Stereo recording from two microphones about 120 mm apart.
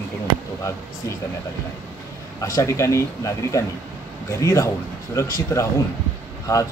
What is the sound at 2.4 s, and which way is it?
Speech, 25° left (ahead or behind).